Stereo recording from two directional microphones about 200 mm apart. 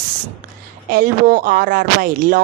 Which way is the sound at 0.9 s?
45° right (ahead or behind).